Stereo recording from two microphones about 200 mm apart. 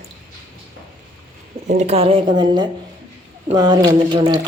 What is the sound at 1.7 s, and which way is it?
Speech, 35° right (ahead or behind).